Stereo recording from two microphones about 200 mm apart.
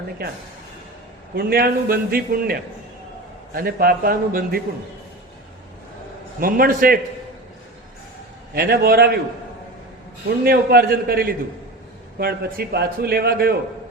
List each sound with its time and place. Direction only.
1.4 s a man's voice: 50° right (ahead or behind)
6.4 s a man's voice: 45° right (ahead or behind)
8.5 s a man's voice: 50° right (ahead or behind)
10.4 s a man's voice: 50° right (ahead or behind)
12.5 s a man's voice: 50° right (ahead or behind)